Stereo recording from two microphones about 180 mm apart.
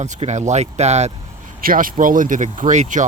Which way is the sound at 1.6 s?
50° right (ahead or behind).